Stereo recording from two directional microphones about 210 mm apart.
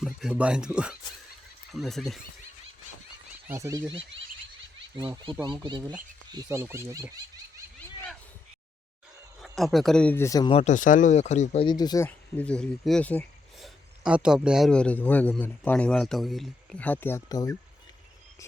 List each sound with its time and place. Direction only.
0.0 s a man's voice: centre (ahead or behind)
3.4 s speech: 15° right (ahead or behind)
4.9 s speech: 20° right (ahead or behind)
9.4 s a man's voice: centre (ahead or behind); by 10.5 s 15° left (ahead or behind)
10.5 s speech: 30° left (ahead or behind); by 13.7 s 5° left (ahead or behind)
14.0 s a man's voice: 5° right (ahead or behind); by 17.6 s 15° left (ahead or behind)